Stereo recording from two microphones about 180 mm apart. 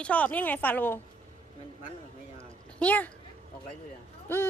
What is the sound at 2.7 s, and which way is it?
Speech, 10° left (ahead or behind).